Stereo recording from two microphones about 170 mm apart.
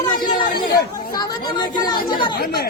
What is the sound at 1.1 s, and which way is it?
Speech, 25° left (ahead or behind).